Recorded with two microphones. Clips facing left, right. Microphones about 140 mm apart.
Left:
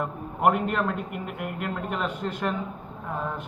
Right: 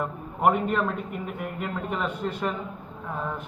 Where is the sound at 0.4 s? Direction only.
5° left (ahead or behind).